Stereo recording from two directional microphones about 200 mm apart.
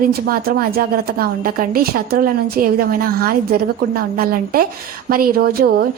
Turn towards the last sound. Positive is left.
turn(degrees=-50)  # may be behind; listen again after turning